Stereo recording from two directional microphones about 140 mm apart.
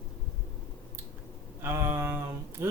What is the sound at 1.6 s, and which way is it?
Speech, 15° right (ahead or behind).